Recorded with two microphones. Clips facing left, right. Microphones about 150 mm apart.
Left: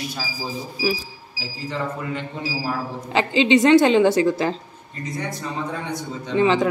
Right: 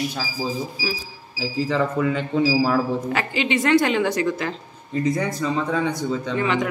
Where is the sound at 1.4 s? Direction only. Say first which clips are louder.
Right 7 dB; 90° right.